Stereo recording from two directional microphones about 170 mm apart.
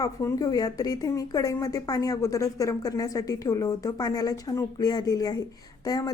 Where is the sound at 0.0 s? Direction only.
20° left (ahead or behind).